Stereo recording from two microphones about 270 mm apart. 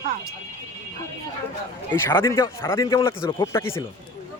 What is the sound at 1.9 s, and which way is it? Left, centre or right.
A man's voice, centre.